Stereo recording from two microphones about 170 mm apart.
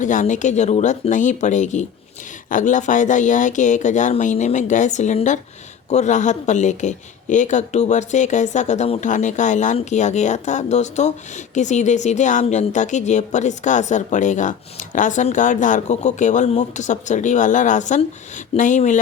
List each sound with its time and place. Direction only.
0.0 s speech: 50° left (ahead or behind)